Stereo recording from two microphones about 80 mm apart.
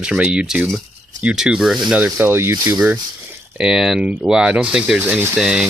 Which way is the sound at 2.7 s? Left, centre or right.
Centre.